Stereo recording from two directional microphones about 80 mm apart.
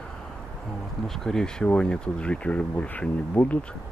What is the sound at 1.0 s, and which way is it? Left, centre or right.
Speech, centre.